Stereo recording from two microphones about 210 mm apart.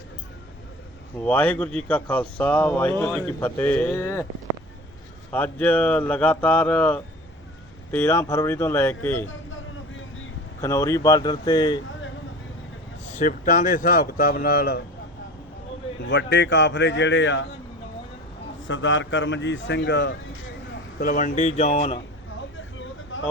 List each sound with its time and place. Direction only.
1.2 s speech: 5° left (ahead or behind)
5.3 s speech: 10° left (ahead or behind)
10.6 s speech: 15° left (ahead or behind)
13.1 s speech: 35° left (ahead or behind)
16.0 s a man's voice: 55° left (ahead or behind)
18.7 s a man's voice: 65° left (ahead or behind)
21.0 s speech: 40° left (ahead or behind)
22.5 s vehicle: 65° left (ahead or behind)